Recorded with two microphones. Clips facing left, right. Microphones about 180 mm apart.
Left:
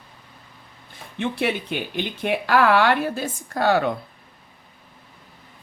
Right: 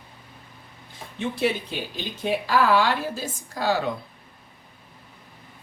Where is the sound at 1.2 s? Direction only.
65° left (ahead or behind).